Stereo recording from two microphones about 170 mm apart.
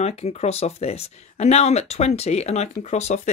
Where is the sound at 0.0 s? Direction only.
40° left (ahead or behind).